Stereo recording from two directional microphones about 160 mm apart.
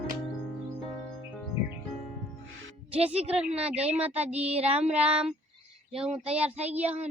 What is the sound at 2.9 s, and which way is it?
A woman's voice, 10° right (ahead or behind).